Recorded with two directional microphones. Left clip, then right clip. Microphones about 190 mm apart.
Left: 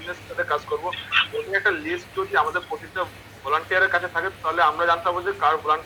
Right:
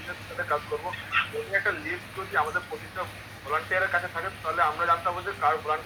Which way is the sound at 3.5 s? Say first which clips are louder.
Left 5 dB; 50° left (ahead or behind).